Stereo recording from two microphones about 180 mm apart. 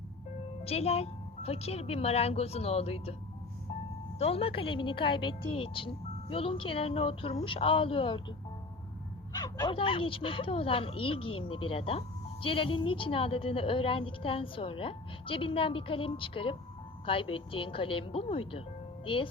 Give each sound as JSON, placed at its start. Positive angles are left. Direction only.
{"t": 0.6, "sound": "a woman's voice", "side_deg": 35}
{"t": 4.2, "sound": "speech", "side_deg": 35}
{"t": 9.3, "sound": "speech", "side_deg": 20}